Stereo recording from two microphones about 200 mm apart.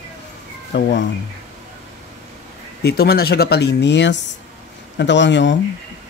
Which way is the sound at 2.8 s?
50° left (ahead or behind).